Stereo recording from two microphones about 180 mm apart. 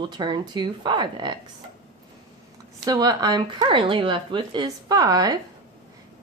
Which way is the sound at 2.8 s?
20° right (ahead or behind).